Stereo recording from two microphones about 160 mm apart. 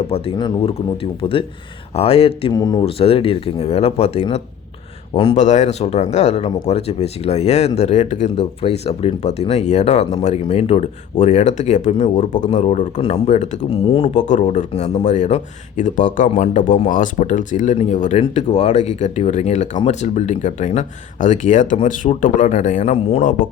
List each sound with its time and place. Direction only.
0.1 s speech: 30° left (ahead or behind)
2.5 s speech: 25° left (ahead or behind)
2.8 s speech: 35° left (ahead or behind)
5.4 s speech: 45° left (ahead or behind)
14.1 s speech: 50° left (ahead or behind)